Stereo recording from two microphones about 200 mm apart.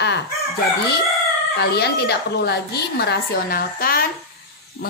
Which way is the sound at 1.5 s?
55° left (ahead or behind).